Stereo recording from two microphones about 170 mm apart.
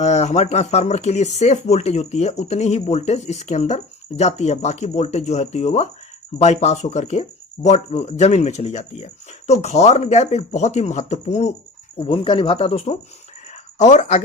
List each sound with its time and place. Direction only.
0.0 s speech: 45° left (ahead or behind)
11.9 s speech: 30° left (ahead or behind)